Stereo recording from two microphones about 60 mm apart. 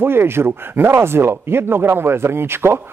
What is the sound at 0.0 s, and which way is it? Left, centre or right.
A man's voice, right.